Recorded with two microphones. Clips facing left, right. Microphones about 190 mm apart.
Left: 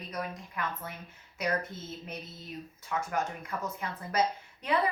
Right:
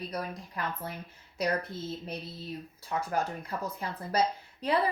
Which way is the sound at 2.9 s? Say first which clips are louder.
Right 2 dB; 35° right (ahead or behind).